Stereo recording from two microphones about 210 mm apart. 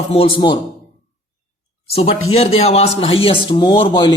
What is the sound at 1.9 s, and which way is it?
A man's voice, 30° left (ahead or behind).